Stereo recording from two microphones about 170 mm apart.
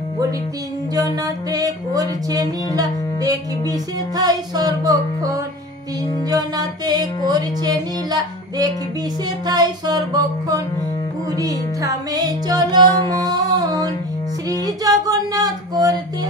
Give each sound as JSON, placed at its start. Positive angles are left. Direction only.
{"t": 0.9, "sound": "music", "side_deg": -20}